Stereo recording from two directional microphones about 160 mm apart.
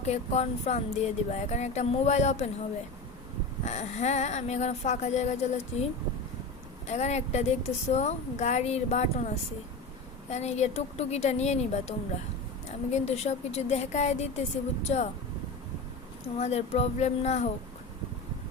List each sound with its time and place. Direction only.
0.1 s a woman's voice: 40° left (ahead or behind)
3.6 s a woman's voice: 45° left (ahead or behind)
16.4 s a woman's voice: 45° left (ahead or behind)